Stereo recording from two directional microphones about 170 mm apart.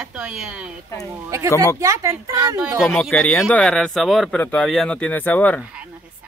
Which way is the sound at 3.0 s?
10° left (ahead or behind).